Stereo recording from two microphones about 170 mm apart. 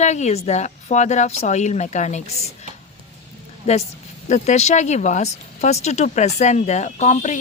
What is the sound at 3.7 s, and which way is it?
Speech, 40° left (ahead or behind).